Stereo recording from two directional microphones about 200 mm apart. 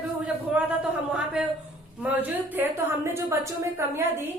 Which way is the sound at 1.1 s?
5° right (ahead or behind).